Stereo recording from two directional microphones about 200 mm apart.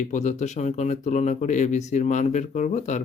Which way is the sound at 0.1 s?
35° left (ahead or behind).